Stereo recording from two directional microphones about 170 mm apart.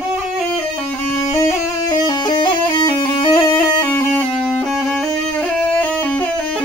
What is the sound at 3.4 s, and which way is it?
Music, 15° left (ahead or behind).